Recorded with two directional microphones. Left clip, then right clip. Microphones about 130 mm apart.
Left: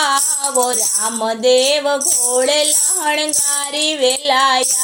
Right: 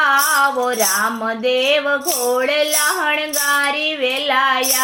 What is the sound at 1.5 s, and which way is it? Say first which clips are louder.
Music: left 2 dB; 30° left (ahead or behind).